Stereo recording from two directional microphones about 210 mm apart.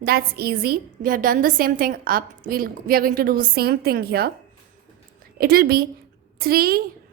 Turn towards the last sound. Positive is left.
turn(degrees=-45)  # may be behind; listen again after turning